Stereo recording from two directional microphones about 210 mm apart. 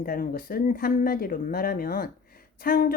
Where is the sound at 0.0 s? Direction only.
45° left (ahead or behind).